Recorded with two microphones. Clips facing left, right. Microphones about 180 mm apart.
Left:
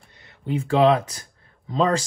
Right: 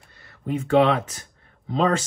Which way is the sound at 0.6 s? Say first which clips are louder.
Left 1 dB; 35° left (ahead or behind).